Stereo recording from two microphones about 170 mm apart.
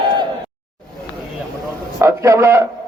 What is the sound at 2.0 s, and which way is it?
Speech, 15° right (ahead or behind).